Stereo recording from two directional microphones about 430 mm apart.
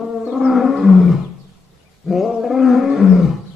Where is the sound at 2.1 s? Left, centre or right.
Centre.